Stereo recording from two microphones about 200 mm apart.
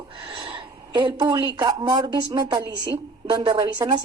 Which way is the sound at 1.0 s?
25° right (ahead or behind).